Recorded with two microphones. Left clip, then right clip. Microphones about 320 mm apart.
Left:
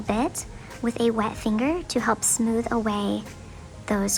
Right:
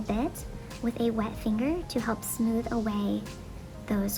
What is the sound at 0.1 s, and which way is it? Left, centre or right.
A woman's voice, centre.